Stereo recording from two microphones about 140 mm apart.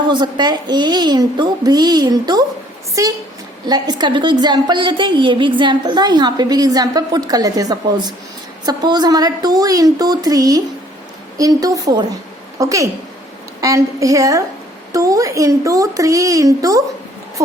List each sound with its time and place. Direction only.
0.0 s a woman's voice: 30° right (ahead or behind)
3.7 s a woman's voice: 30° right (ahead or behind)